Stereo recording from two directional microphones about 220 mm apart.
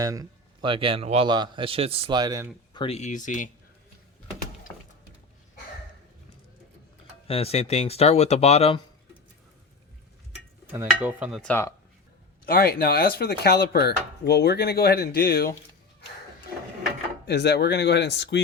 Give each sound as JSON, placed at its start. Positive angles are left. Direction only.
{"t": 0.0, "sound": "speech", "side_deg": -15}
{"t": 2.7, "sound": "speech", "side_deg": 25}
{"t": 7.3, "sound": "speech", "side_deg": 25}
{"t": 10.7, "sound": "speech", "side_deg": -5}
{"t": 12.5, "sound": "speech", "side_deg": 40}
{"t": 17.2, "sound": "speech", "side_deg": 50}